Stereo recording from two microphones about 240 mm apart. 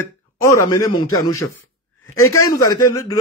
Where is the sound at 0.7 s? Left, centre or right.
Centre.